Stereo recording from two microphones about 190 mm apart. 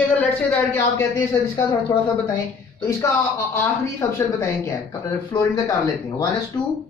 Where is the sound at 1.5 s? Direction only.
20° left (ahead or behind).